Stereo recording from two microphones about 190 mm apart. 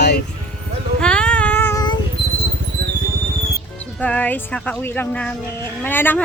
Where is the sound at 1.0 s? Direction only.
5° left (ahead or behind).